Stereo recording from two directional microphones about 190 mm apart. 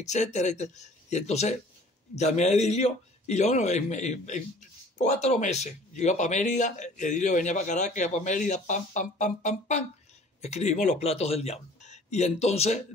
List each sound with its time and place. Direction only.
0.0 s speech: 40° left (ahead or behind)